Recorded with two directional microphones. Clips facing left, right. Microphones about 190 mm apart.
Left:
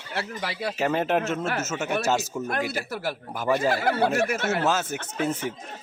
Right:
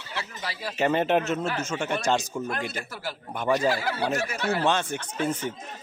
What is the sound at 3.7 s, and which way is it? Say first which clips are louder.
Speech: left 5 dB; 55° left (ahead or behind).